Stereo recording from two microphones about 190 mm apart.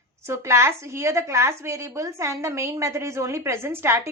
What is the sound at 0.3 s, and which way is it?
A woman's voice, 15° right (ahead or behind).